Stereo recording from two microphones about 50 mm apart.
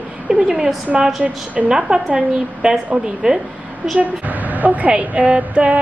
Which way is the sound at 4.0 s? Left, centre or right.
Right.